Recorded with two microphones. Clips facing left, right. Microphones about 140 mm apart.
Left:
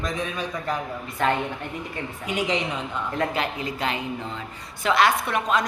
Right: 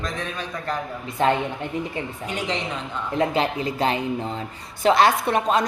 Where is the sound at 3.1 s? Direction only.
25° right (ahead or behind).